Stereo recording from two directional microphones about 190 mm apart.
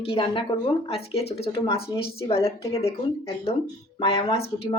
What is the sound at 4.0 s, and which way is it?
Speech, 25° left (ahead or behind).